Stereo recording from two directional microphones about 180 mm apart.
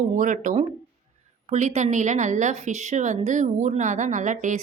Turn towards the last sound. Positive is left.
turn(degrees=-45)  # may be behind; listen again after turning